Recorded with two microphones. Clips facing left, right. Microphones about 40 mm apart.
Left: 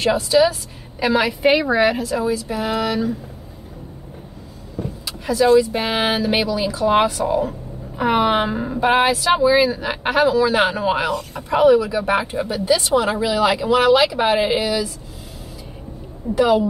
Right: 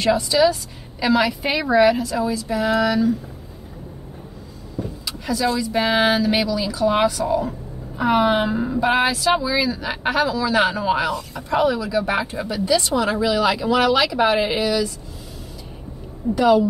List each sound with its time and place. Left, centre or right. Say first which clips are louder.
0.0 s a woman's voice: left 1 dB; left
2.0 s speech: left 1 dB; left
5.2 s a woman's voice: left 8 dB; left
11.1 s a woman's voice: left 2 dB; left
11.5 s speech: left 5 dB; left
13.7 s speech: left 4 dB; left
16.2 s a woman's voice: right 2 dB; centre